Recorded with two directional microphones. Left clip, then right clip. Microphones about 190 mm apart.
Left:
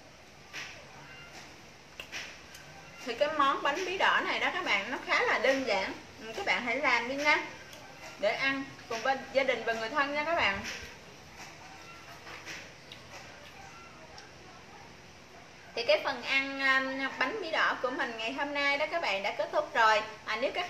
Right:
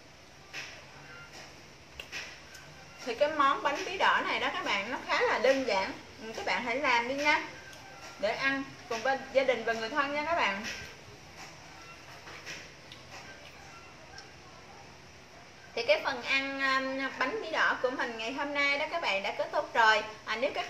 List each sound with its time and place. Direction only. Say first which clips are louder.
3.2 s a woman's voice: right 1 dB; centre (ahead or behind)
15.7 s a woman's voice: even; centre (ahead or behind)